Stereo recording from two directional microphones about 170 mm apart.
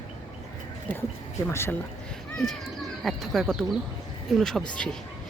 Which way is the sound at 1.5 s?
15° left (ahead or behind).